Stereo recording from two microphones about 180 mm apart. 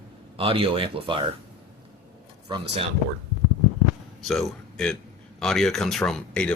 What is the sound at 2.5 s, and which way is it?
Speech, 25° right (ahead or behind).